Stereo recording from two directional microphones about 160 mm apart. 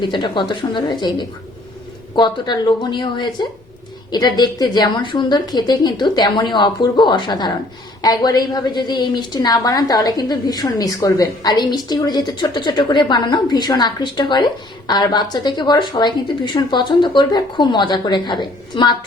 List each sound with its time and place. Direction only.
0.0 s a woman's voice: 30° left (ahead or behind)